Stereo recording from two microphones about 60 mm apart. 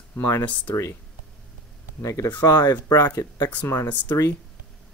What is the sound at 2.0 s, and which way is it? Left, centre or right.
Speech, left.